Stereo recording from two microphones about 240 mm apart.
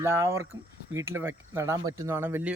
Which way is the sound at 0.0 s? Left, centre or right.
Centre.